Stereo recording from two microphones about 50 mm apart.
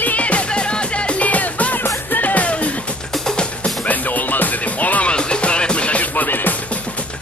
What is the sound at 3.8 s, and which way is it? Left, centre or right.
Music, left.